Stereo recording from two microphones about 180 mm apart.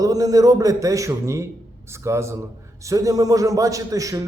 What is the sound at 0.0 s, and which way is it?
A man's voice, 20° right (ahead or behind).